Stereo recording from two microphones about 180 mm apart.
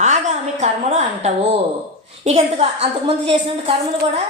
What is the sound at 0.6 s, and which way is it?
Speech, 35° right (ahead or behind).